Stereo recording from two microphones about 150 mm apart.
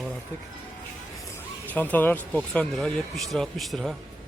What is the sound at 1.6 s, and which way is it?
Speech, 10° left (ahead or behind).